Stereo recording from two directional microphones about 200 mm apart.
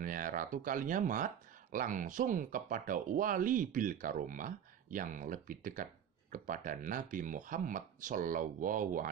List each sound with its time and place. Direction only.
0.0 s speech: 45° right (ahead or behind)